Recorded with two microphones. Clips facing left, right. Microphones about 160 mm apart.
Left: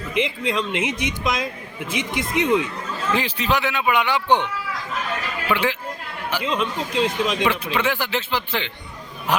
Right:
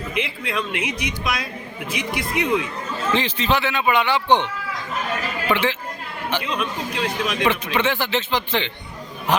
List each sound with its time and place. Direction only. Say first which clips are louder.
0.1 s speech: left 5 dB; 20° left (ahead or behind)
3.2 s a man's voice: right 1 dB; 10° left (ahead or behind)
5.5 s a man's voice: right 1 dB; 10° left (ahead or behind)
6.4 s speech: left 2 dB; 20° left (ahead or behind)
7.4 s speech: right 1 dB; 5° left (ahead or behind)